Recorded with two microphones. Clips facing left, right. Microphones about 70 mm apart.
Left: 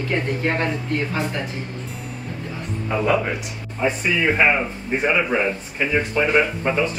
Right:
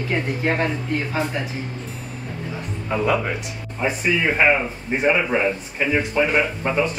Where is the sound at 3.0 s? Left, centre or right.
Centre.